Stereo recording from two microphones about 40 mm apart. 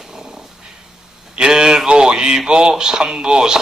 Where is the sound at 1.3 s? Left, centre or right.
Centre.